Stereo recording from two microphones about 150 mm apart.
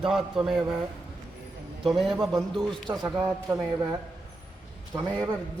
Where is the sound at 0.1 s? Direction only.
5° right (ahead or behind).